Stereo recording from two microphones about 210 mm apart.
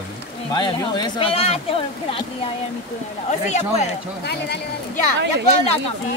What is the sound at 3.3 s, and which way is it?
Speech, 35° left (ahead or behind).